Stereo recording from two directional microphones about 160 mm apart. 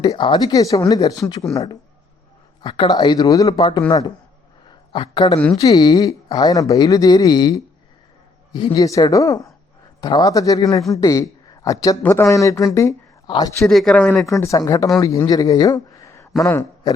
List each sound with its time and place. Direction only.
0.0 s speech: 30° left (ahead or behind)
2.6 s speech: 30° left (ahead or behind)
8.5 s a man's voice: 30° left (ahead or behind)
13.7 s speech: 5° left (ahead or behind)
14.3 s a man's voice: 20° left (ahead or behind)